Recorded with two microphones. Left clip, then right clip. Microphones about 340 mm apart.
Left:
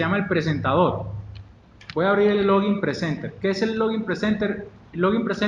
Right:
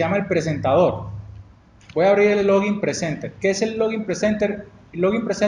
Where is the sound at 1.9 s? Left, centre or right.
Right.